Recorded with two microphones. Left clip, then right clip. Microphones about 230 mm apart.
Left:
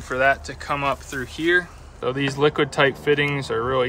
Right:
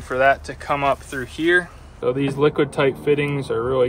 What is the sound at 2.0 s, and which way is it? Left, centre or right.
Speech, left.